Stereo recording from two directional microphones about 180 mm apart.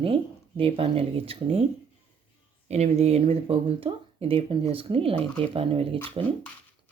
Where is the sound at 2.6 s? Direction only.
35° right (ahead or behind).